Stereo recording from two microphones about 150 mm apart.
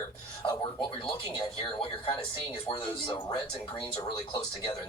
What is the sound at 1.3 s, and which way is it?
Speech, 35° left (ahead or behind).